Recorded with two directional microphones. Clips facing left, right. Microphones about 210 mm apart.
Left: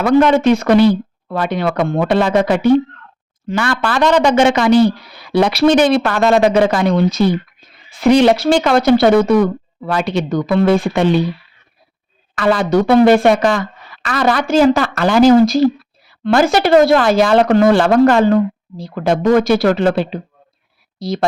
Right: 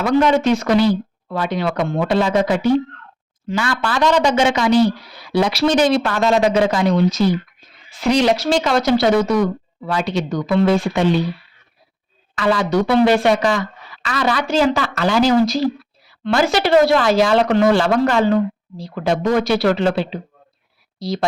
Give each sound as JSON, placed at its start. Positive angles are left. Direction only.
{"t": 0.0, "sound": "speech", "side_deg": 60}
{"t": 12.3, "sound": "speech", "side_deg": 55}